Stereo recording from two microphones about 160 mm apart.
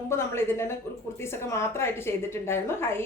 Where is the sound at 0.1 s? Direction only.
15° left (ahead or behind).